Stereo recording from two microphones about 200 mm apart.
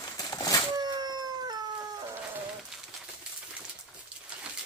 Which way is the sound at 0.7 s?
20° right (ahead or behind).